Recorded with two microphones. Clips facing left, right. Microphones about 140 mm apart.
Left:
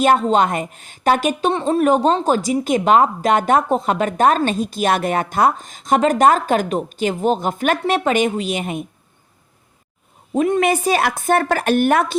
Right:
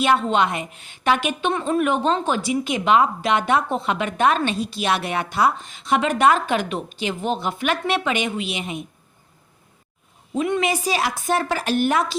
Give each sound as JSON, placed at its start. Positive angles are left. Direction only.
{"t": 0.0, "sound": "a woman's voice", "side_deg": 40}
{"t": 10.3, "sound": "a woman's voice", "side_deg": 45}